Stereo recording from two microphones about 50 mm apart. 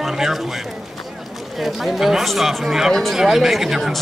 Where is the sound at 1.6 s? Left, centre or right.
Centre.